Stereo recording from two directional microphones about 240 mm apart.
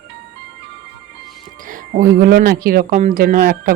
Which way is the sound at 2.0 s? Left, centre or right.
Right.